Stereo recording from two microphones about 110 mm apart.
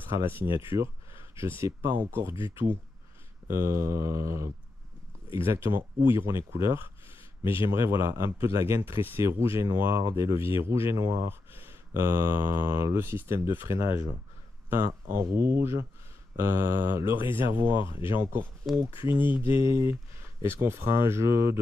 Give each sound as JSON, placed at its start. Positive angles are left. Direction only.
{"t": 0.1, "sound": "speech", "side_deg": -20}
{"t": 0.7, "sound": "speech", "side_deg": -55}
{"t": 1.6, "sound": "speech", "side_deg": -20}
{"t": 3.4, "sound": "speech", "side_deg": -25}
{"t": 19.0, "sound": "speech", "side_deg": -20}